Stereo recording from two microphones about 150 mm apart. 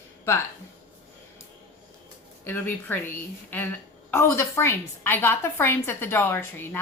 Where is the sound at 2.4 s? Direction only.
15° left (ahead or behind).